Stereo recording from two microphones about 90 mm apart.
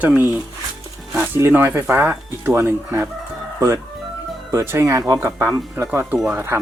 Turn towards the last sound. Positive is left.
turn(degrees=-25)  # may be behind; listen again after turning